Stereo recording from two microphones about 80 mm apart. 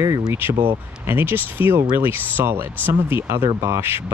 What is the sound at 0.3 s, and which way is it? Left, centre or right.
Speech, right.